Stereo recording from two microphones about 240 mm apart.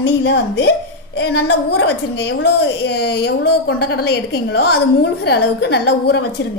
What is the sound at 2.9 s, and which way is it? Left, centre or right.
A woman's voice, left.